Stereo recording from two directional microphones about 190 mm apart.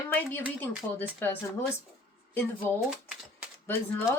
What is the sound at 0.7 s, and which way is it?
Speech, 10° right (ahead or behind).